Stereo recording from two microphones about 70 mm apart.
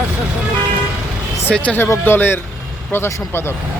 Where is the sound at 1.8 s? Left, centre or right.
Left.